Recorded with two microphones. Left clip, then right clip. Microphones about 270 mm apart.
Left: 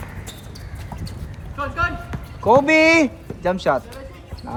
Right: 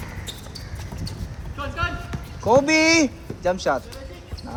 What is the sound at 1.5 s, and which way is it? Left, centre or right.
Speech, centre.